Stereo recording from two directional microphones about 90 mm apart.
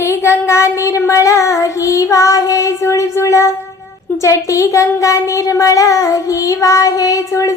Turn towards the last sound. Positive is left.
turn(degrees=35)  # may be behind; listen again after turning